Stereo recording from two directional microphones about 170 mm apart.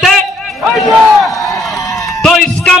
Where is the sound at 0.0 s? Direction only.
Centre (ahead or behind).